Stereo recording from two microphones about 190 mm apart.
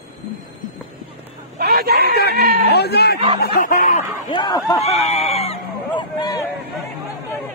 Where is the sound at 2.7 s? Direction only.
60° left (ahead or behind).